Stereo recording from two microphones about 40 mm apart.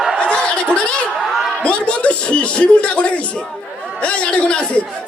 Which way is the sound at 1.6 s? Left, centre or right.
Left.